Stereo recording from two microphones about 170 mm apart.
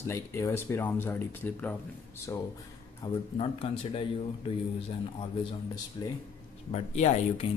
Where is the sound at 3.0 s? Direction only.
25° left (ahead or behind).